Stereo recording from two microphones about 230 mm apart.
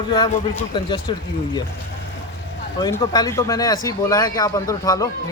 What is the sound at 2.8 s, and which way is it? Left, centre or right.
Speech, centre.